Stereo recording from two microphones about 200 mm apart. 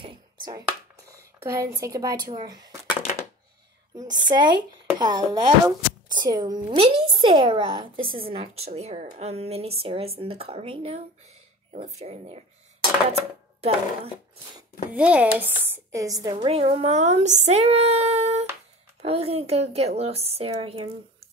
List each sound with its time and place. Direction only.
0.0 s hands: 20° right (ahead or behind)
0.7 s speech: 15° right (ahead or behind)
3.9 s speech: 20° right (ahead or behind)
13.1 s dishes: 30° right (ahead or behind)
14.9 s speech: 5° right (ahead or behind)
16.4 s speech: 30° right (ahead or behind)